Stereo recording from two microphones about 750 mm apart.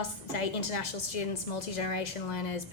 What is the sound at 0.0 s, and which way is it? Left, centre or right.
A woman's voice, left.